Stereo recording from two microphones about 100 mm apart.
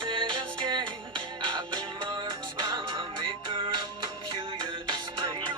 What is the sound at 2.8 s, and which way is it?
Music, 55° right (ahead or behind).